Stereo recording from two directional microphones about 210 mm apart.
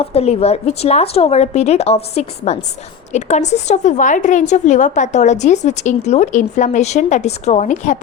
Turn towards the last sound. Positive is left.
turn(degrees=35)  # may be behind; listen again after turning